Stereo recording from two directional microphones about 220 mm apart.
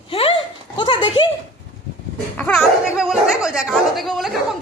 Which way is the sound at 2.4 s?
5° left (ahead or behind).